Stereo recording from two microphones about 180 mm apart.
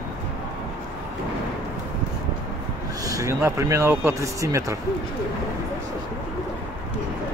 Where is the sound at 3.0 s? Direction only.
15° right (ahead or behind).